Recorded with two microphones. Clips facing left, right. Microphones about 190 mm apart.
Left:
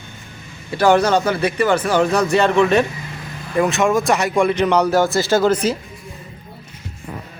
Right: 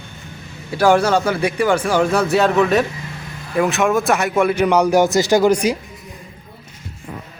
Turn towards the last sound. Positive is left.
turn(degrees=-15)  # may be behind; listen again after turning